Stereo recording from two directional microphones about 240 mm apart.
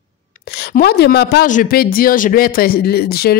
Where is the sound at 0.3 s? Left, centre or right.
Left.